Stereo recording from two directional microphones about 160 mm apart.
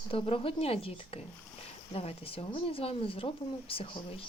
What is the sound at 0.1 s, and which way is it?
Speech, 35° left (ahead or behind).